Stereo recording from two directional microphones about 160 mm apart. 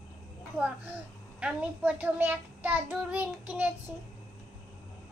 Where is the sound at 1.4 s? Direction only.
5° right (ahead or behind).